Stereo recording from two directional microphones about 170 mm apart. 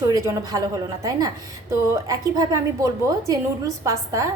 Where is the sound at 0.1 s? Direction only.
20° right (ahead or behind).